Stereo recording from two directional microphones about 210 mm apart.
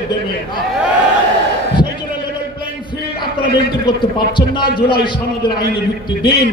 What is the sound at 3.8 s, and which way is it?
Speech, 20° left (ahead or behind).